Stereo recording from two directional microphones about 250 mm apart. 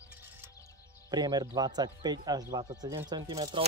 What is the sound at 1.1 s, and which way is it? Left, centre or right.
Speech, centre.